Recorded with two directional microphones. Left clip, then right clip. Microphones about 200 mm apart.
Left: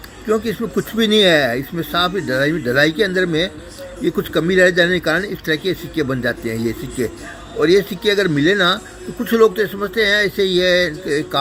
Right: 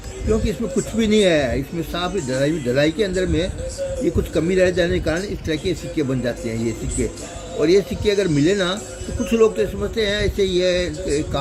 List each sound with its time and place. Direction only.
0.3 s speech: 20° left (ahead or behind)
7.6 s speech: 20° left (ahead or behind)